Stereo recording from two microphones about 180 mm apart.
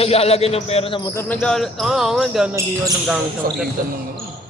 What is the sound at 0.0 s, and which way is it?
Speech, 35° left (ahead or behind).